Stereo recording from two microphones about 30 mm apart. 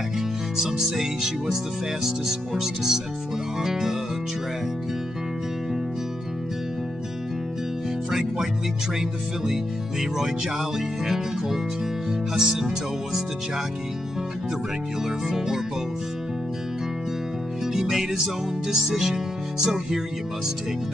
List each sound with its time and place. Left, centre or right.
0.6 s speech: centre
2.6 s speech: centre
9.4 s speech: centre
15.0 s speech: centre
17.7 s music: centre
18.7 s speech: centre